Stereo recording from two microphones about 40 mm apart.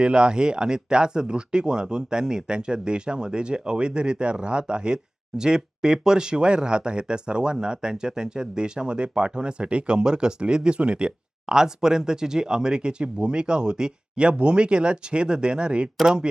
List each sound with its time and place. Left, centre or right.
0.0 s speech: right